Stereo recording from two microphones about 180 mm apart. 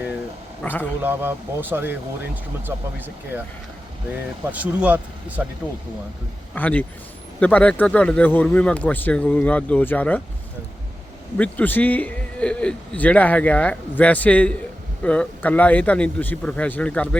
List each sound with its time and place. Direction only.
0.6 s speech: 10° left (ahead or behind)
1.0 s speech: 10° right (ahead or behind)
4.5 s speech: 10° right (ahead or behind)
6.5 s speech: 10° left (ahead or behind)
11.3 s speech: 10° left (ahead or behind)